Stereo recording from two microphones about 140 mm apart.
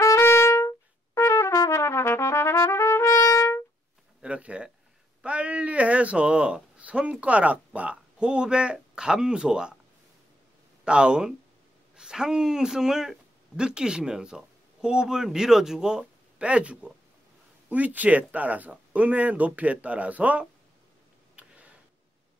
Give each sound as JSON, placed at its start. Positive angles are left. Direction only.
{"t": 0.0, "sound": "trumpet", "side_deg": 20}
{"t": 4.2, "sound": "a sound", "side_deg": -10}
{"t": 5.2, "sound": "speech", "side_deg": -10}
{"t": 10.9, "sound": "speech", "side_deg": -5}
{"t": 21.4, "sound": "tick", "side_deg": -10}